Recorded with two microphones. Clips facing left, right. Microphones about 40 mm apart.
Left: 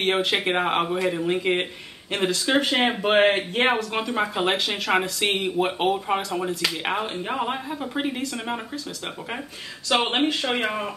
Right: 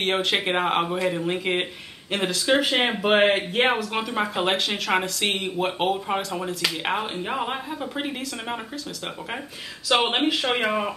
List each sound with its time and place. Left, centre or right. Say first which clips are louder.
0.0 s speech: left 1 dB; centre
9.9 s speech: right 1 dB; centre